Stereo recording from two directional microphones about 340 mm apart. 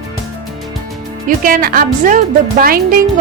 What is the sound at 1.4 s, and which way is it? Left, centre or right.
Speech, right.